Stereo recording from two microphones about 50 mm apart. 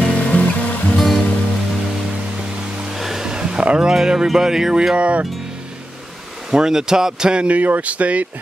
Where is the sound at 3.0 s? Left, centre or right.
Centre.